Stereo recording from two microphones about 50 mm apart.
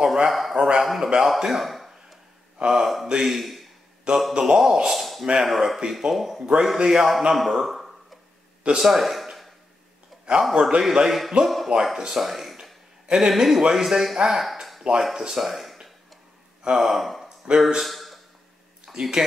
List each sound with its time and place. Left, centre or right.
0.0 s speech: centre
1.4 s a sound: centre
2.6 s speech: centre
4.3 s speech: centre
5.5 s a man's voice: centre
8.7 s a sound: centre
10.5 s a man's voice: centre
10.8 s speech: centre
11.7 s speech: centre
14.4 s a sound: centre
16.7 s speech: centre
17.9 s a sound: centre
18.9 s speech: centre